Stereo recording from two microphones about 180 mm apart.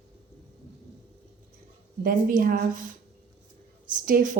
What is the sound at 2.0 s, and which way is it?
Speech, 50° right (ahead or behind).